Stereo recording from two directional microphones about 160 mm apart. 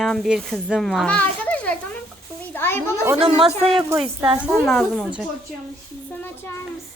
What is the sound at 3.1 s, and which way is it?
Speech, 35° right (ahead or behind).